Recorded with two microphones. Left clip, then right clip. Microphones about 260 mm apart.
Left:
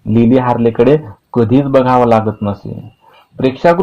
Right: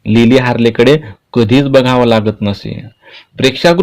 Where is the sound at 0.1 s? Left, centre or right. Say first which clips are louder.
Right 2 dB; right.